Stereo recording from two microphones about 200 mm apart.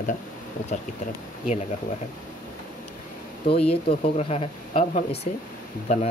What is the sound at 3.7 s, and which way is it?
Speech, 30° left (ahead or behind).